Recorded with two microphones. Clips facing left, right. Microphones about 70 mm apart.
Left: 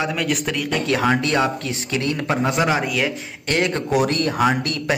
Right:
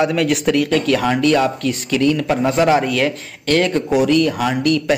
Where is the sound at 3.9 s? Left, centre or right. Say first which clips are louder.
Right 5 dB; left.